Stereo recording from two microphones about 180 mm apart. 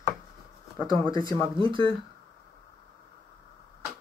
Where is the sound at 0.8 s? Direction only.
20° left (ahead or behind).